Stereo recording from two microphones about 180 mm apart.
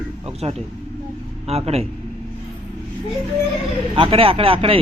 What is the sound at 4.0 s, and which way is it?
Speech, 30° right (ahead or behind).